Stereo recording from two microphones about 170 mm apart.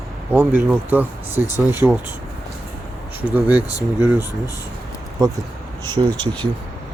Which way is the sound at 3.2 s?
10° right (ahead or behind).